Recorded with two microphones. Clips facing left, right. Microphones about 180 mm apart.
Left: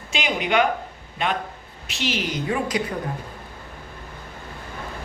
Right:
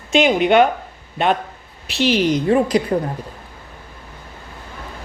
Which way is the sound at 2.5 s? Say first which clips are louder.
Right 7 dB; 35° right (ahead or behind).